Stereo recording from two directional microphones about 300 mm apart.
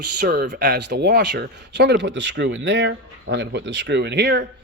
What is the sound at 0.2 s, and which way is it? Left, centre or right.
Speech, right.